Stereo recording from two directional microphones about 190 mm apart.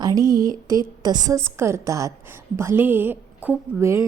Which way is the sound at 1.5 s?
15° right (ahead or behind).